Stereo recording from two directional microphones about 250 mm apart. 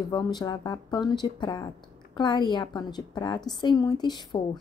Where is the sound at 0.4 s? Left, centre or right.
Centre.